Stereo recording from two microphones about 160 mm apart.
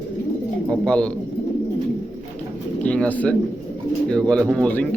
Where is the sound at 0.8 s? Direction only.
5° left (ahead or behind).